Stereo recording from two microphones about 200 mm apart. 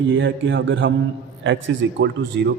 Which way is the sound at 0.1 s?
70° right (ahead or behind).